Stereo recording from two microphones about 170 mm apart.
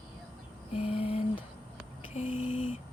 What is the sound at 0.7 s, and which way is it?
Speech, 35° left (ahead or behind).